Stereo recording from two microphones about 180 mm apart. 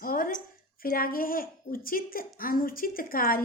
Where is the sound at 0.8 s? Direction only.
55° left (ahead or behind).